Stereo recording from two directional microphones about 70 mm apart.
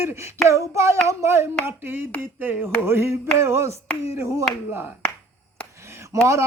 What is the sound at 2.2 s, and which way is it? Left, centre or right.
Mantra, right.